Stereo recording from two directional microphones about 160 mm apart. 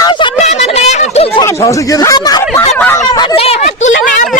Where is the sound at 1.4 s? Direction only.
20° left (ahead or behind).